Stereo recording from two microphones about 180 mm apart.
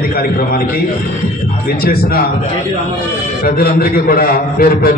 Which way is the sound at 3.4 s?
55° left (ahead or behind).